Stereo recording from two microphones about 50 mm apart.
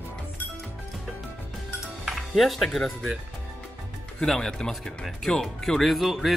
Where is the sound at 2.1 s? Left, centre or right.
Centre.